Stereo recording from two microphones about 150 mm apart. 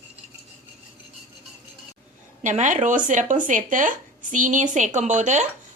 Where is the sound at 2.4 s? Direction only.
55° right (ahead or behind).